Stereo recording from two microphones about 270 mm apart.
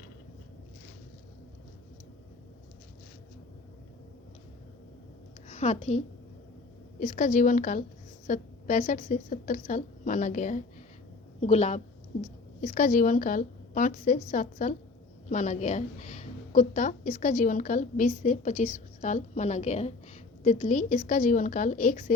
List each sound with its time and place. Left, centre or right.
5.5 s a woman's voice: left
7.0 s a woman's voice: left